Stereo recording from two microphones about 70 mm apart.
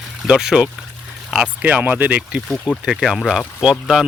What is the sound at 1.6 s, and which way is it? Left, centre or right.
Speech, right.